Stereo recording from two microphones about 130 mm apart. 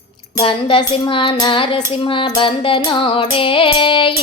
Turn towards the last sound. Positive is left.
turn(degrees=40)  # may be behind; listen again after turning